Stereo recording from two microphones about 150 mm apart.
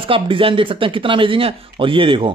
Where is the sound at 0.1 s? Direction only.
35° right (ahead or behind).